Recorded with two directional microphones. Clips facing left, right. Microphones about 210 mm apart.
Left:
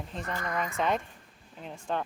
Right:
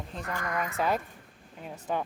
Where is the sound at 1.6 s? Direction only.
5° right (ahead or behind).